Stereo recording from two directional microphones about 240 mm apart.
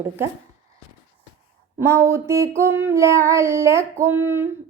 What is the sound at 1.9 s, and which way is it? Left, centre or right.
A woman's voice, centre.